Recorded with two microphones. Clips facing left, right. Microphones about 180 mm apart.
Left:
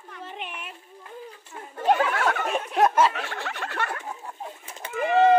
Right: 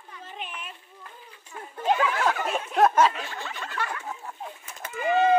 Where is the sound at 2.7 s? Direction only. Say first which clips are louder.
Right 1 dB; 10° left (ahead or behind).